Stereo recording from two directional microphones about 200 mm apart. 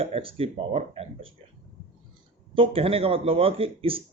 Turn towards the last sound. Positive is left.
turn(degrees=-30)  # may be behind; listen again after turning